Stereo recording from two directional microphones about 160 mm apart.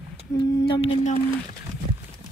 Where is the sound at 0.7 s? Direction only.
40° left (ahead or behind).